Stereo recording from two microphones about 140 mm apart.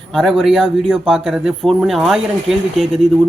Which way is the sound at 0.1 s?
Centre (ahead or behind).